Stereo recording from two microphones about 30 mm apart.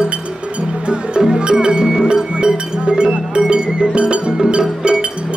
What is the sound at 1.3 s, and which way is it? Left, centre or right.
Music, right.